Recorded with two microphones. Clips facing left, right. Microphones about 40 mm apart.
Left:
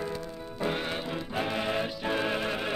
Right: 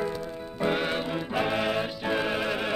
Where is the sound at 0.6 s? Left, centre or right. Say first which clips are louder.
Right 5 dB; right.